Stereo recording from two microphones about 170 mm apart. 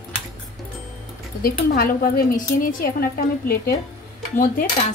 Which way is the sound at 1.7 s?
55° left (ahead or behind).